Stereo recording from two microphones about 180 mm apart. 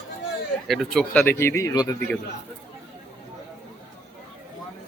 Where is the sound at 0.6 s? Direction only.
Centre (ahead or behind); by 1.9 s 15° left (ahead or behind).